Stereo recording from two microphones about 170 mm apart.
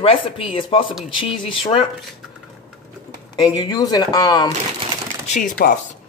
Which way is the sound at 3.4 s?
25° left (ahead or behind).